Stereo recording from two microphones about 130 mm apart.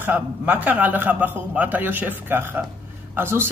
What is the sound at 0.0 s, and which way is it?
Speech, 10° right (ahead or behind).